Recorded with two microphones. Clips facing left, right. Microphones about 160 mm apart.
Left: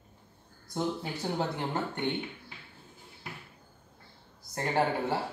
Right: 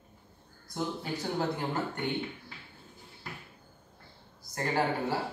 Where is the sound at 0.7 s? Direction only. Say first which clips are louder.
Left 2 dB; 25° left (ahead or behind).